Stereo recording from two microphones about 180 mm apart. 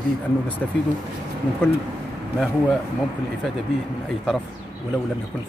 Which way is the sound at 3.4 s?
Centre (ahead or behind).